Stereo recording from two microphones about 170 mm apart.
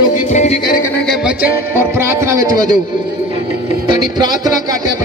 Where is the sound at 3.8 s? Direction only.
25° right (ahead or behind).